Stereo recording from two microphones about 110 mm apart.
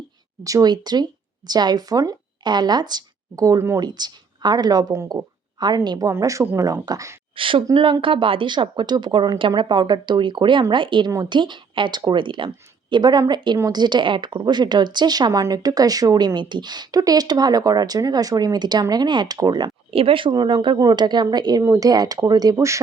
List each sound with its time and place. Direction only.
0.4 s a woman's voice: 35° right (ahead or behind)
6.1 s a woman's voice: 30° right (ahead or behind)
7.3 s a woman's voice: 50° right (ahead or behind)
19.9 s speech: 55° right (ahead or behind)
20.3 s a woman's voice: 40° right (ahead or behind)